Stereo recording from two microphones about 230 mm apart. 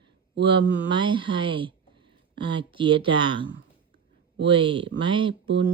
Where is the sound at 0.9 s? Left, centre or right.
Right.